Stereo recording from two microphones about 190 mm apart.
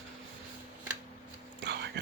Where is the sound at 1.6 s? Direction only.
65° right (ahead or behind).